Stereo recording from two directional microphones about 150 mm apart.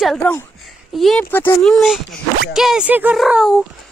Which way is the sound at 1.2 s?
15° left (ahead or behind).